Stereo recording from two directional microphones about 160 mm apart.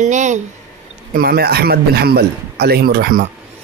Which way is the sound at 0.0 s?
50° right (ahead or behind).